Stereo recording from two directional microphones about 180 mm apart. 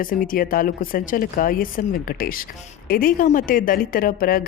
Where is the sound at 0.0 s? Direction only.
50° left (ahead or behind).